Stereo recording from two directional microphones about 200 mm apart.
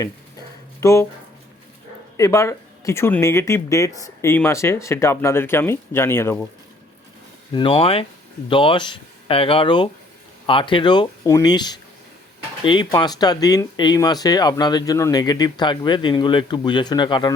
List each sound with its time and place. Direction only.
0.8 s speech: 15° left (ahead or behind)
2.1 s speech: 15° left (ahead or behind)
7.5 s speech: 25° left (ahead or behind)